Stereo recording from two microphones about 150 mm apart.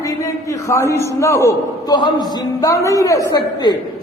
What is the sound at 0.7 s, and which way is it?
A man's voice, 20° left (ahead or behind).